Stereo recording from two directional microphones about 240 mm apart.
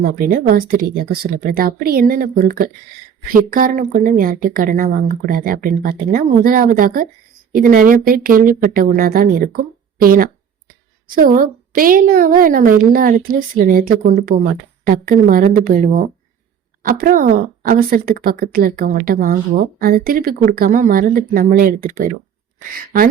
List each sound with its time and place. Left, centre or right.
0.0 s speech: right